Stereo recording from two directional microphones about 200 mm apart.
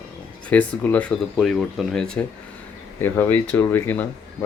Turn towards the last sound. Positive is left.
turn(degrees=10)  # may be behind; listen again after turning